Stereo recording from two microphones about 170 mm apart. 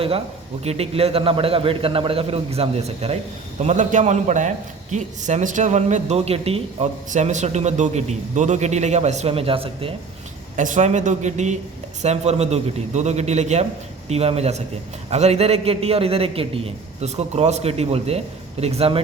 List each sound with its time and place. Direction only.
0.6 s a man's voice: 35° right (ahead or behind)
10.6 s a man's voice: 45° right (ahead or behind)